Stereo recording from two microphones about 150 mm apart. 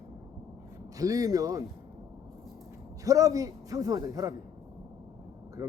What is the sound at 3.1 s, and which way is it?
A man's voice, 20° right (ahead or behind).